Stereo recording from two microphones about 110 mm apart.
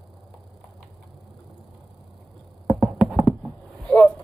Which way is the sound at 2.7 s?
Centre (ahead or behind).